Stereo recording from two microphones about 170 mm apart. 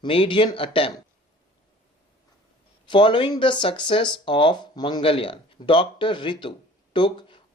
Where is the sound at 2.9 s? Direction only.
30° left (ahead or behind).